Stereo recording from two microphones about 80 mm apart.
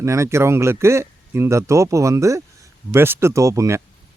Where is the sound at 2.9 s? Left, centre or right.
Right.